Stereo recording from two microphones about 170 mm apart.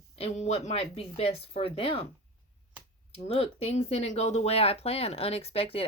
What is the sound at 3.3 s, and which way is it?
Speech, 35° left (ahead or behind).